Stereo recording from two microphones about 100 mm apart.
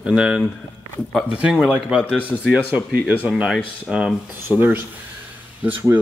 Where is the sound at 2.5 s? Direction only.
10° right (ahead or behind).